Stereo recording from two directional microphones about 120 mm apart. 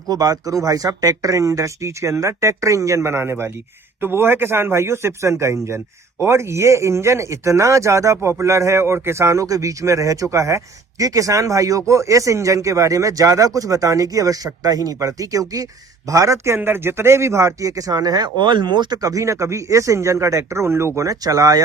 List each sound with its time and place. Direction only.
0.1 s speech: 30° right (ahead or behind)